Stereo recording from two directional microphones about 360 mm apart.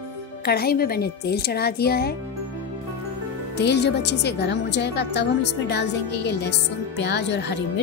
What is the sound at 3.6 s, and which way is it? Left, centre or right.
Speech, left.